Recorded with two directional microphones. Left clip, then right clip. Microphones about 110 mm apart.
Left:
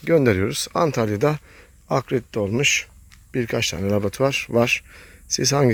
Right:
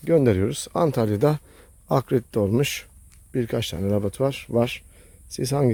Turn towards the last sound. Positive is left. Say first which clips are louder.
# left 4 dB
turn(degrees=-10)  # may be behind; listen again after turning